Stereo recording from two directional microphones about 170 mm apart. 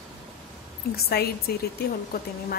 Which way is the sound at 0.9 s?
65° left (ahead or behind).